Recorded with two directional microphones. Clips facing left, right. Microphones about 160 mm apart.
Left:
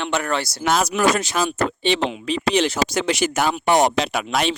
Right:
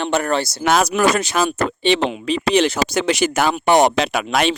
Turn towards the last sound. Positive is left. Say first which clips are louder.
# right 3 dB
turn(degrees=-70)  # may be behind; listen again after turning